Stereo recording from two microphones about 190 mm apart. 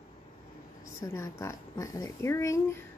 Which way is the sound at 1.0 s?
15° left (ahead or behind).